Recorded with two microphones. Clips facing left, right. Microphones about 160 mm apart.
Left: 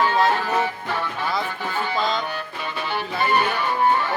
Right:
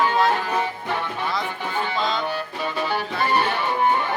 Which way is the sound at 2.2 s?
35° right (ahead or behind).